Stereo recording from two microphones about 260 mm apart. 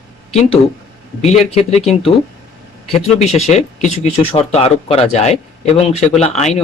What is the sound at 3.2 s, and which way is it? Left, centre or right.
Speech, left.